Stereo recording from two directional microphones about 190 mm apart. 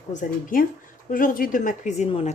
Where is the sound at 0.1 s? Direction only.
45° left (ahead or behind).